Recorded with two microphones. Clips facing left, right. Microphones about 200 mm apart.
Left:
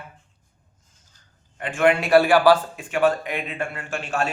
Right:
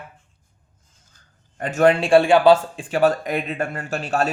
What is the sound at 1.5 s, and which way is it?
Speech, 40° right (ahead or behind).